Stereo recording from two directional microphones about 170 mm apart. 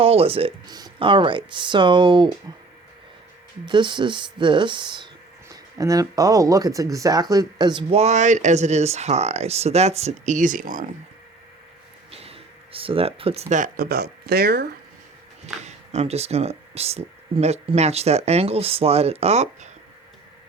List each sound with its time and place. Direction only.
0.0 s speech: 35° right (ahead or behind)
0.7 s speech: 25° right (ahead or behind)
3.7 s speech: 25° right (ahead or behind); by 10.8 s 55° right (ahead or behind)
12.1 s speech: 35° right (ahead or behind); by 14.7 s 70° right (ahead or behind)
15.6 s speech: 40° right (ahead or behind)